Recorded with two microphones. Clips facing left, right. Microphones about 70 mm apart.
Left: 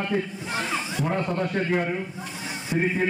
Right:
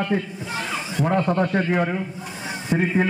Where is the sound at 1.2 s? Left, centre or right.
Right.